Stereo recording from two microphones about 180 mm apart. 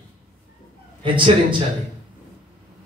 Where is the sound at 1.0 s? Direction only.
25° right (ahead or behind).